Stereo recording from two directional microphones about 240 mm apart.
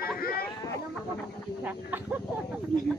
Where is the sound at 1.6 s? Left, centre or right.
Centre.